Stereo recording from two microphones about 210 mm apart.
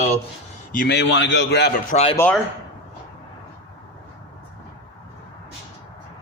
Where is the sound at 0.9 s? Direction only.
60° left (ahead or behind).